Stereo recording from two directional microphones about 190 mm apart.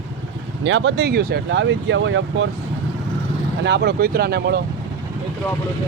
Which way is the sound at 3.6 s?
60° right (ahead or behind).